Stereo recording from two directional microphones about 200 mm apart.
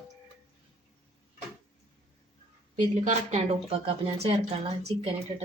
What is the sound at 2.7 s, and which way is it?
Speech, 35° right (ahead or behind).